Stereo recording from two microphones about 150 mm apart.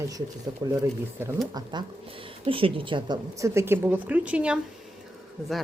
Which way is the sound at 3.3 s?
20° right (ahead or behind).